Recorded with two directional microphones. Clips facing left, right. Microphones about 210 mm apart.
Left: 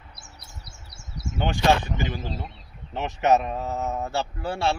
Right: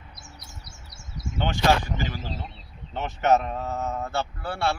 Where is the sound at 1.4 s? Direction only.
15° left (ahead or behind).